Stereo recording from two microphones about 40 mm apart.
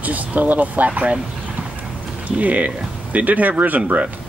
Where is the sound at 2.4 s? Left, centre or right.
Right.